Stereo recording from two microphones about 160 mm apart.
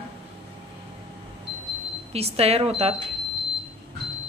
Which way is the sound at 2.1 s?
40° right (ahead or behind).